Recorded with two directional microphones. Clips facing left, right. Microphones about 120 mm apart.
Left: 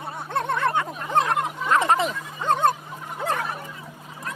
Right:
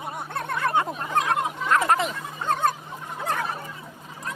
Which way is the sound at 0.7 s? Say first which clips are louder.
Right 2 dB; 35° right (ahead or behind).